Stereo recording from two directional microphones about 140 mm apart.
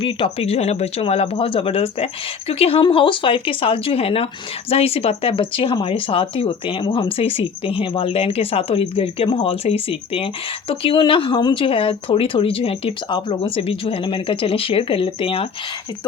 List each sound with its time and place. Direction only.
0.0 s speech: 40° left (ahead or behind)